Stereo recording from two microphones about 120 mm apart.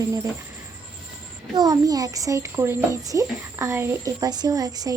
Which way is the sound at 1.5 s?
35° right (ahead or behind).